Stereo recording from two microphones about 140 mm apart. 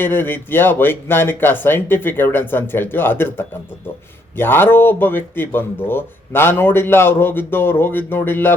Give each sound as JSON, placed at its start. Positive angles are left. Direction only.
{"t": 0.0, "sound": "speech", "side_deg": 15}